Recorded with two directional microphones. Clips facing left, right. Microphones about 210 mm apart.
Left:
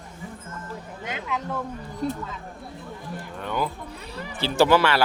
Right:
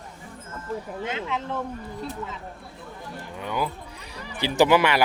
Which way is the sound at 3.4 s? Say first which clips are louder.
Even; 10° right (ahead or behind).